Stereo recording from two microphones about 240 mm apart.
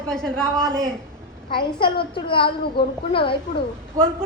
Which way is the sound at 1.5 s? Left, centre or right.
Left.